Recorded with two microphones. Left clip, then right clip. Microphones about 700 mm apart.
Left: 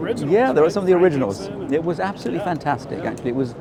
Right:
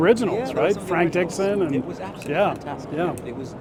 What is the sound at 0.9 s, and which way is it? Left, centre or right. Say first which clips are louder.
Speech: left 3 dB; right.